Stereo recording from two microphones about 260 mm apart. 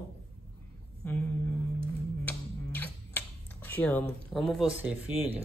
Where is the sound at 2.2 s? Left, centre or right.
Centre.